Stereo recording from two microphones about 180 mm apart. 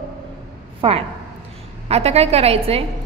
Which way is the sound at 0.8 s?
30° right (ahead or behind).